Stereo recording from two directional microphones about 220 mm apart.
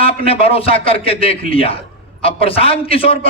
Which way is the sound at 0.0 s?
25° left (ahead or behind).